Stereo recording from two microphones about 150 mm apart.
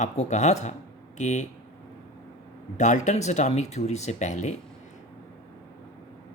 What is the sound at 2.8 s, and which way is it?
Speech, 55° left (ahead or behind).